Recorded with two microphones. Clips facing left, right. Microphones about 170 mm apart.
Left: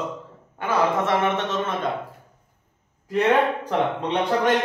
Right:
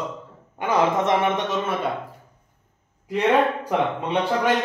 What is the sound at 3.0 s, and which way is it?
Speech, 10° right (ahead or behind).